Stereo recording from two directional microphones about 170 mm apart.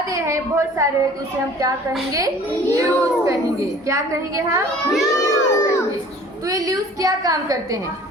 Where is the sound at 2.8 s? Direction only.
20° right (ahead or behind).